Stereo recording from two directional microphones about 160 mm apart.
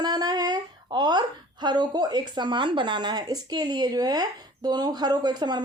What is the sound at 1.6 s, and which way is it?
Speech, 25° right (ahead or behind).